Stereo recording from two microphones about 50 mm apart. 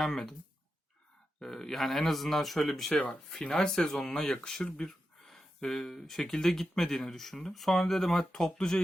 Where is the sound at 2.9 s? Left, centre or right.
Left.